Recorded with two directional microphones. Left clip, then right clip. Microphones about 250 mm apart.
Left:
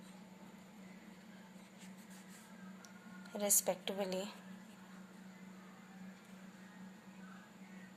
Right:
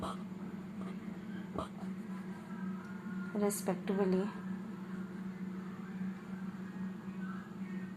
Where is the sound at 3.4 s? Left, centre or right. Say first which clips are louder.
Even; left.